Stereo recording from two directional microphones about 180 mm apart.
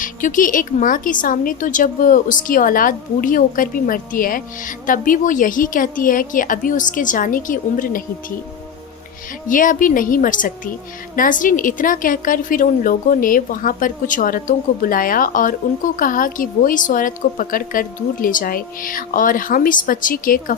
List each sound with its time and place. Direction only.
0.0 s a woman's voice: 45° left (ahead or behind)
9.5 s a woman's voice: 50° left (ahead or behind)